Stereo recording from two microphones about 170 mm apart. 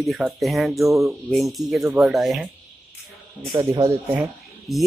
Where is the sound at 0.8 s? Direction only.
20° right (ahead or behind).